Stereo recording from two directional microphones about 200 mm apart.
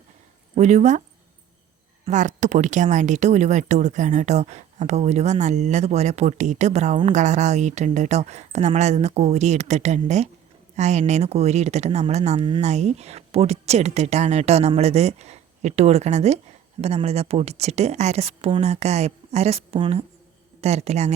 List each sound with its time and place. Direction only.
0.5 s speech: 35° right (ahead or behind)
2.0 s speech: 35° right (ahead or behind)